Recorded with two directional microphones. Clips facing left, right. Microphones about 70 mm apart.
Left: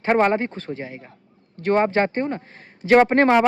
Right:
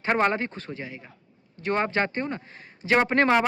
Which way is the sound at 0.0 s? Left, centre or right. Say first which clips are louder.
Left 5 dB; left.